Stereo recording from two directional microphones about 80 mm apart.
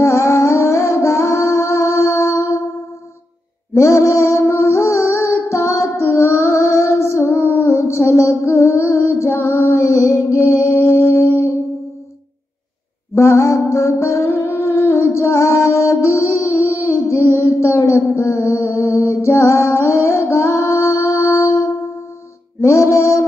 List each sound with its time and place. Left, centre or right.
0.0 s music: left
3.8 s music: left
13.1 s music: left
16.8 s a sound: left
22.6 s music: left